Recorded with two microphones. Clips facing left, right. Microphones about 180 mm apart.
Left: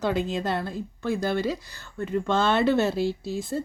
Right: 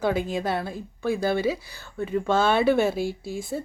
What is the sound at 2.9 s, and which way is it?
Speech, 50° right (ahead or behind).